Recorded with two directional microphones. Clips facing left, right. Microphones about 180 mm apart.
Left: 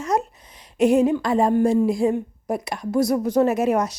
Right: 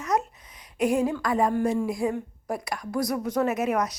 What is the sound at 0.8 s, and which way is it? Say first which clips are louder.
A woman's voice: left 7 dB; 25° left (ahead or behind).